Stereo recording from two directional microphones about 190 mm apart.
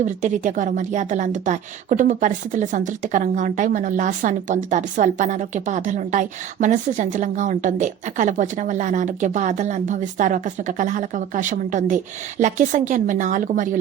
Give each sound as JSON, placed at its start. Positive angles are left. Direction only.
{"t": 0.0, "sound": "a woman's voice", "side_deg": -40}